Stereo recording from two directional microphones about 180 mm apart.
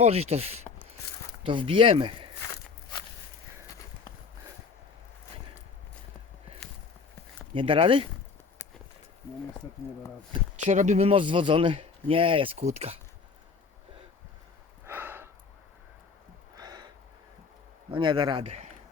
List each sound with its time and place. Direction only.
0.0 s speech: 35° right (ahead or behind)
6.6 s walk: 5° left (ahead or behind)
7.5 s speech: 30° right (ahead or behind)
10.6 s speech: 40° right (ahead or behind)
14.8 s a sound: 10° right (ahead or behind)
16.6 s a sound: 20° right (ahead or behind)
17.9 s speech: 25° right (ahead or behind)